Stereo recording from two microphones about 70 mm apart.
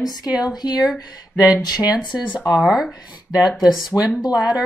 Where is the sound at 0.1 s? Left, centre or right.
Left.